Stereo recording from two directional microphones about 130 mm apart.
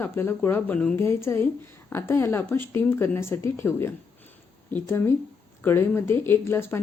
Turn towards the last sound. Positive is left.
turn(degrees=20)  # may be behind; listen again after turning